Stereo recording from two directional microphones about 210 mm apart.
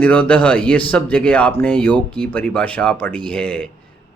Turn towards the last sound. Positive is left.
turn(degrees=5)  # may be behind; listen again after turning